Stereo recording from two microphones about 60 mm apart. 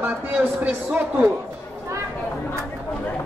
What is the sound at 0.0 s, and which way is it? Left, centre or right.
Speech, right.